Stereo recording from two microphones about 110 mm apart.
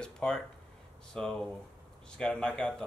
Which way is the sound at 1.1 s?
5° left (ahead or behind).